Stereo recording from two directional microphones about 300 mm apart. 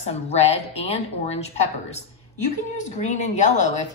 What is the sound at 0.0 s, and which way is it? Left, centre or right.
A woman's voice, left.